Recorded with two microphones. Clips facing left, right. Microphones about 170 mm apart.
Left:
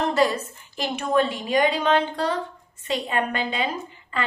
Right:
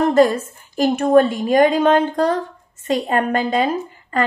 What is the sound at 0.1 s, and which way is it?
A woman's voice, 50° right (ahead or behind).